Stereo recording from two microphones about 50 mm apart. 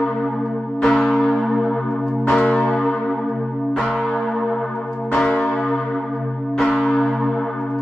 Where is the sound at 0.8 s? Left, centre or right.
Centre.